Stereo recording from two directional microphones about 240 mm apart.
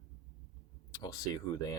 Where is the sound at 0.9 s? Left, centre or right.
Centre.